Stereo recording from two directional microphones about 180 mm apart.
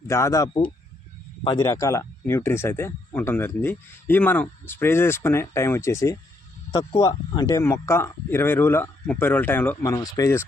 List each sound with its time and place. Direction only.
0.1 s speech: 15° left (ahead or behind)